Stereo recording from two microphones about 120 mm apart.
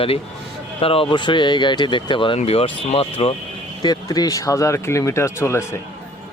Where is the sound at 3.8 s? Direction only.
35° left (ahead or behind).